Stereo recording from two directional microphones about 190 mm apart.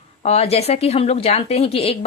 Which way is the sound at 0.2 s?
35° left (ahead or behind).